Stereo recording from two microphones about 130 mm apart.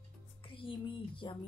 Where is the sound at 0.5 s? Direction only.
40° left (ahead or behind).